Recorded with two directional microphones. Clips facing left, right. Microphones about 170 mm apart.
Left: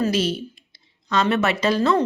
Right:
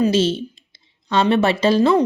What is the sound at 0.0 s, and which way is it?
A woman's voice, 25° right (ahead or behind).